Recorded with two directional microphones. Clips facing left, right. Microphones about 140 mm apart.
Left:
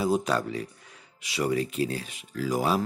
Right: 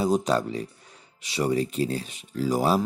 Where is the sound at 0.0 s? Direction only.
25° right (ahead or behind).